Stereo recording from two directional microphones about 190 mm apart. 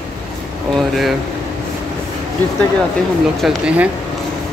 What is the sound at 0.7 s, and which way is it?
Speech, centre (ahead or behind).